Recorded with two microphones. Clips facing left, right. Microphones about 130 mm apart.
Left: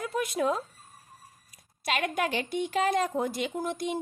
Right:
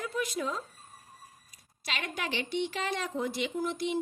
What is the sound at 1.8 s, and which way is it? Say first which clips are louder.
A woman's voice: left 7 dB; 50° left (ahead or behind).